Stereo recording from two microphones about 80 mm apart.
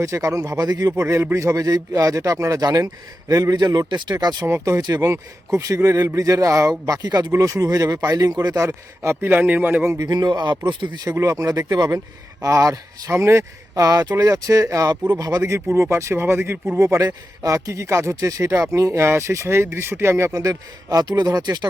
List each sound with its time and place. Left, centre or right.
0.0 s a man's voice: right
1.0 s a man's voice: right
4.1 s a man's voice: right
4.4 s a man's voice: right
9.0 s a man's voice: right
10.0 s speech: right
10.7 s speech: right
11.2 s a man's voice: right
13.1 s speech: right
13.8 s a man's voice: right
15.4 s speech: right
20.3 s speech: right